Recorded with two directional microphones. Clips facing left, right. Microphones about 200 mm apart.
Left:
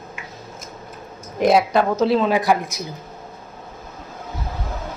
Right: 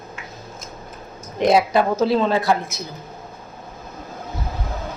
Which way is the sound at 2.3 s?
15° left (ahead or behind).